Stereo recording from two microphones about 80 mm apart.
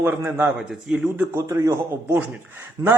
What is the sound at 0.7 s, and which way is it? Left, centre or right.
Speech, centre.